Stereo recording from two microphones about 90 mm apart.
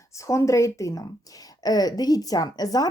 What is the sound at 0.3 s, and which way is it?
A woman's voice, 35° left (ahead or behind).